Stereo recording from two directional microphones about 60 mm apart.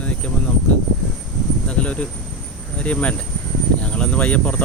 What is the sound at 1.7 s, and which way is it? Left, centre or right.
Speech, left.